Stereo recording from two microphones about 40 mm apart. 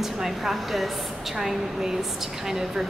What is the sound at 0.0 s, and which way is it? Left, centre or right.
A woman's voice, centre.